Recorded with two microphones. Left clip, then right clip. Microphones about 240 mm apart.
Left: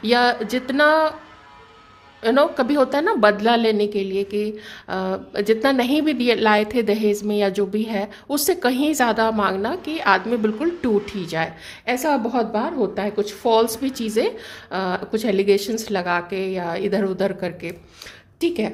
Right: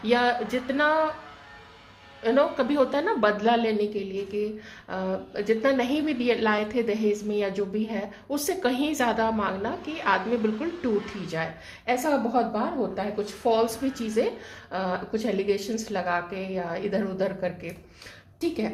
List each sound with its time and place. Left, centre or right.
0.0 s a woman's voice: left
2.2 s a woman's voice: left